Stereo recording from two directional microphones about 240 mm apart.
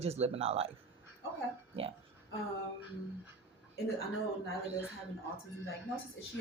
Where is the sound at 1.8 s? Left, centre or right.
Right.